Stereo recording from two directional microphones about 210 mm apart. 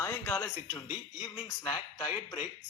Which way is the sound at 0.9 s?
Centre (ahead or behind).